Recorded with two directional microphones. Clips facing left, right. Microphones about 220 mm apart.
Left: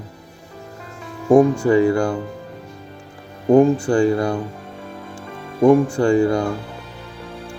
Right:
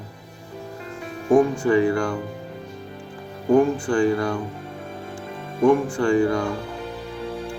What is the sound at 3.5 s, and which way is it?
Speech, 25° left (ahead or behind).